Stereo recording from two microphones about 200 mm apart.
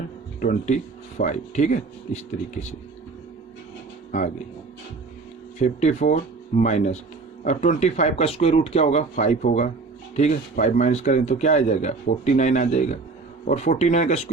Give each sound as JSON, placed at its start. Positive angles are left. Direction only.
{"t": 0.4, "sound": "speech", "side_deg": 40}
{"t": 5.5, "sound": "speech", "side_deg": 35}